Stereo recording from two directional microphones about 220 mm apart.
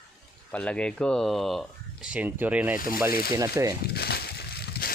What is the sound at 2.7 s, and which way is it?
Speech, 40° left (ahead or behind).